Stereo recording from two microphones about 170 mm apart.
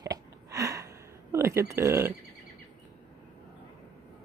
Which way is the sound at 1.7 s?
15° right (ahead or behind).